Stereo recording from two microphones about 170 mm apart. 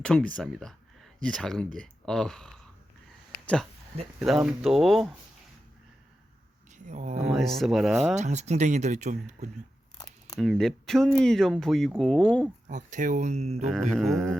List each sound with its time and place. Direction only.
0.0 s speech: 5° left (ahead or behind)
6.7 s speech: 45° right (ahead or behind)
7.3 s speech: centre (ahead or behind)
8.1 s speech: 40° right (ahead or behind)
10.3 s speech: centre (ahead or behind)
12.6 s speech: 45° right (ahead or behind)
13.7 s speech: centre (ahead or behind)